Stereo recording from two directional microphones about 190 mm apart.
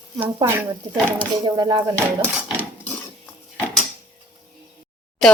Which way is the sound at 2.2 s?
10° right (ahead or behind).